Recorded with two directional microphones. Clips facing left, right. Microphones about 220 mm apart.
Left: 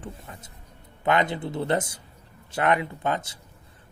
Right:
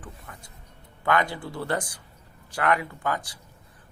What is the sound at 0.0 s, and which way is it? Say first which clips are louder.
Music: left 4 dB; 25° left (ahead or behind).